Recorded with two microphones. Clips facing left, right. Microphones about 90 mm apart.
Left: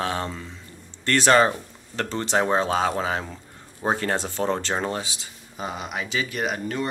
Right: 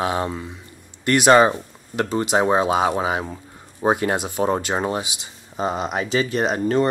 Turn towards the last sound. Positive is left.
turn(degrees=-35)  # may be behind; listen again after turning